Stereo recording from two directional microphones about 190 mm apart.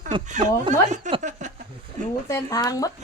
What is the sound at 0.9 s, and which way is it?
Speech, 40° right (ahead or behind).